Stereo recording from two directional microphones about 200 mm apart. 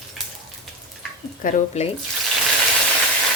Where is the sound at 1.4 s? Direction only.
45° left (ahead or behind).